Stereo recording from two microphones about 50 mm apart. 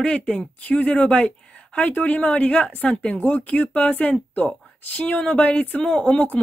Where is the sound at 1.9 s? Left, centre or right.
Left.